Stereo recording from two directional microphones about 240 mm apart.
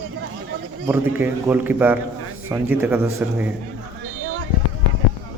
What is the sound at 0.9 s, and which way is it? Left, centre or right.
A man's voice, centre.